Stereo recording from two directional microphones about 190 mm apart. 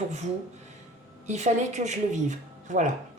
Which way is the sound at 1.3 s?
40° right (ahead or behind).